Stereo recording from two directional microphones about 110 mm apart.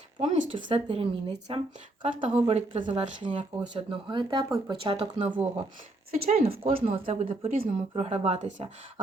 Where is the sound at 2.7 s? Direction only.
45° right (ahead or behind).